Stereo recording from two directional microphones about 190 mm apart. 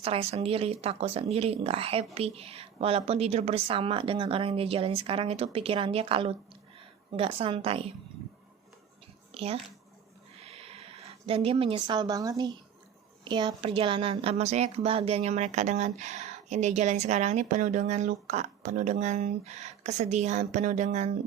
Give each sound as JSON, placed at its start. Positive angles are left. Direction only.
{"t": 0.0, "sound": "a woman's voice", "side_deg": -30}
{"t": 9.3, "sound": "a child's voice", "side_deg": -30}
{"t": 10.4, "sound": "a sound", "side_deg": -30}
{"t": 11.3, "sound": "a woman's voice", "side_deg": -30}